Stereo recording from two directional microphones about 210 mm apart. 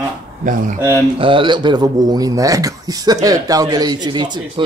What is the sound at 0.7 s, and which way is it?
Speech, 15° right (ahead or behind).